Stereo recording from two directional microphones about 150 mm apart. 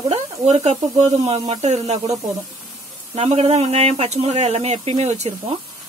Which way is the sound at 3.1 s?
45° right (ahead or behind).